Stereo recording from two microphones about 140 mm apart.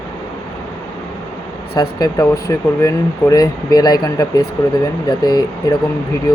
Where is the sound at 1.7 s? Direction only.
30° left (ahead or behind).